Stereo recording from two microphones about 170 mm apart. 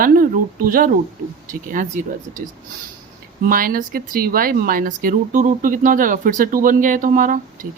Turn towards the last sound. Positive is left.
turn(degrees=-50)  # may be behind; listen again after turning